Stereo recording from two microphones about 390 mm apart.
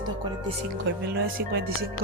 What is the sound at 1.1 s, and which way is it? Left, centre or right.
Speech, right.